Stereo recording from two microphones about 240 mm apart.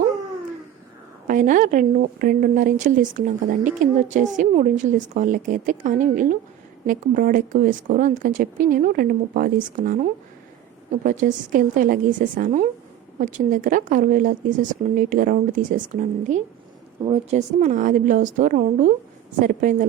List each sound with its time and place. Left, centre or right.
1.3 s speech: right
11.0 s speech: right